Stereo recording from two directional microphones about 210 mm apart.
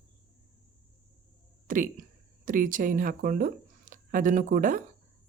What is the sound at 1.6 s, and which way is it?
Speech, 40° right (ahead or behind).